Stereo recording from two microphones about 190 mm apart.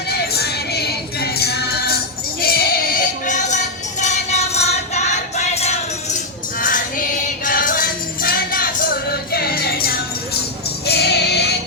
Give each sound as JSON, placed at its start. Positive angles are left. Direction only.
{"t": 0.3, "sound": "music", "side_deg": 55}
{"t": 6.6, "sound": "music", "side_deg": 45}